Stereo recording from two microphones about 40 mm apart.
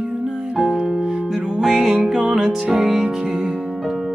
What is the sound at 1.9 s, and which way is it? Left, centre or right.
Music, right.